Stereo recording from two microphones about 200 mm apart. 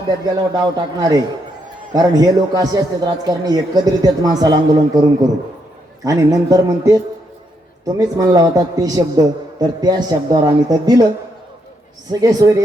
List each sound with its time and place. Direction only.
0.3 s a man's voice: 20° right (ahead or behind)
12.2 s speech: 15° right (ahead or behind)